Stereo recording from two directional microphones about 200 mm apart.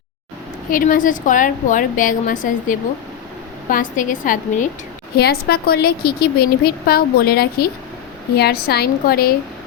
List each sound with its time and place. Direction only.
0.7 s a woman's voice: 40° left (ahead or behind)
5.1 s a woman's voice: 50° left (ahead or behind)